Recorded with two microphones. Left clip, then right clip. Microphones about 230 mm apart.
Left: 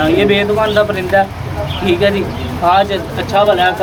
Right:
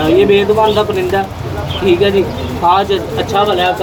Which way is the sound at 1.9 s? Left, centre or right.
Left.